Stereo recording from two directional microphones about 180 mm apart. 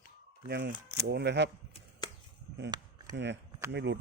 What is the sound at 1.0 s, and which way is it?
Speech, 75° right (ahead or behind).